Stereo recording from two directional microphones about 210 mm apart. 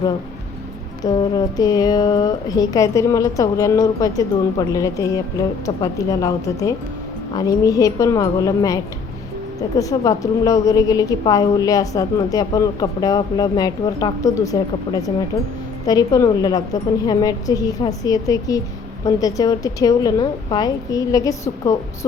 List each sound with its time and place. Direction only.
1.0 s a woman's voice: 20° left (ahead or behind)